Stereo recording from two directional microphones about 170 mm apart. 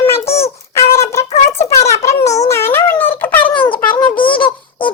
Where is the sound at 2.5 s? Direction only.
15° left (ahead or behind).